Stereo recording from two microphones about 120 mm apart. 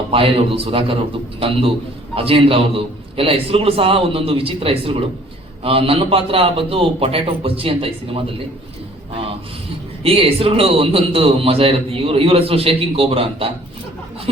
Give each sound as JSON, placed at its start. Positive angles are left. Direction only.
{"t": 0.1, "sound": "a man's voice", "side_deg": -50}
{"t": 10.0, "sound": "a man's voice", "side_deg": -50}